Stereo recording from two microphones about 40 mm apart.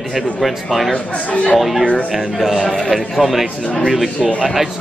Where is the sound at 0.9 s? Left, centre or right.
Left.